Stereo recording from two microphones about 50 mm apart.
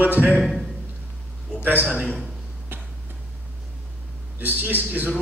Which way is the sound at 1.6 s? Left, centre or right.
Right.